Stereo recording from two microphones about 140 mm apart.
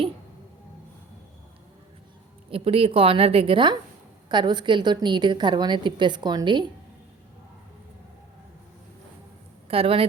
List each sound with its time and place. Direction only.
2.5 s a woman's voice: 40° right (ahead or behind)
9.6 s speech: 40° right (ahead or behind)